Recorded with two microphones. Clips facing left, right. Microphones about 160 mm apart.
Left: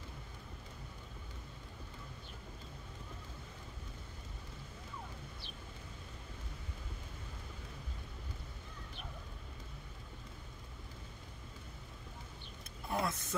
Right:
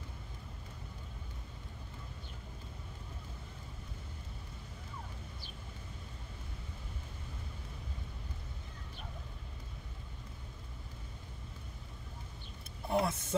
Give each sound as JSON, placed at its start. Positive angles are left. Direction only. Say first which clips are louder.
{"t": 12.9, "sound": "speech", "louder": "right 5 dB", "side_deg": -25}